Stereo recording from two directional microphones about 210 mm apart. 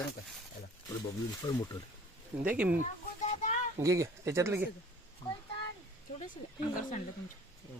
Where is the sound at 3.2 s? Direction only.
35° left (ahead or behind).